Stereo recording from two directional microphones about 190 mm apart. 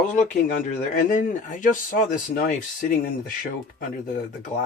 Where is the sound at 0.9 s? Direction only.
45° left (ahead or behind).